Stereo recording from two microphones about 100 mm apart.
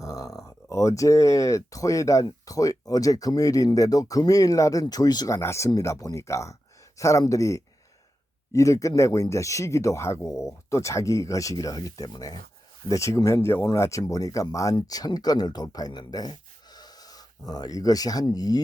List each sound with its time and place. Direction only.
0.0 s speech: 35° left (ahead or behind)
5.4 s speech: 30° left (ahead or behind)